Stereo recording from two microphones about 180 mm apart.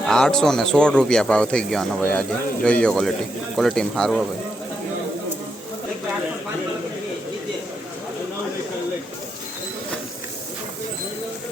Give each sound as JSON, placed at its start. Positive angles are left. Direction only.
{"t": 0.0, "sound": "speech", "side_deg": 5}